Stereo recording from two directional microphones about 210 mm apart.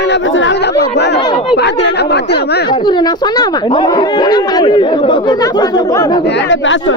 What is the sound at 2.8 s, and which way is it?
Speech, 20° left (ahead or behind).